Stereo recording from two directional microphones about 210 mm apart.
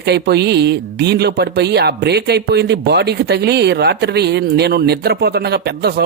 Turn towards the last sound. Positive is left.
turn(degrees=-50)  # may be behind; listen again after turning